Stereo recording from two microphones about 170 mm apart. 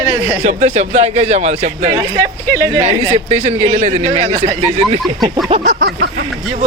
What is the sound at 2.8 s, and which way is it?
Speech, 40° right (ahead or behind).